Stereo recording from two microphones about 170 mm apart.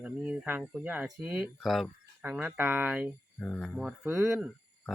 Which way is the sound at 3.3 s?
5° left (ahead or behind).